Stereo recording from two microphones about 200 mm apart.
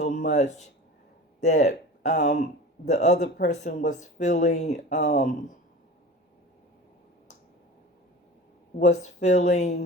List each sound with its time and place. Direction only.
0.0 s speech: 35° left (ahead or behind)
4.9 s speech: 55° left (ahead or behind)
8.8 s speech: 35° left (ahead or behind)